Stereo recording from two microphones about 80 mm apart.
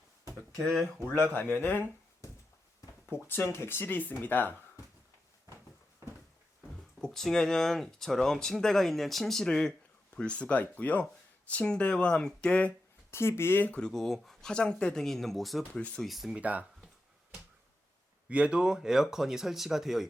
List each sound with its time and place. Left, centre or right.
0.6 s speech: centre
1.3 s speech: left
3.1 s speech: left
7.0 s speech: centre
13.1 s speech: left; by 13.9 s centre
13.9 s speech: centre
15.8 s speech: centre
16.0 s speech: centre
16.3 s speech: centre
18.3 s speech: centre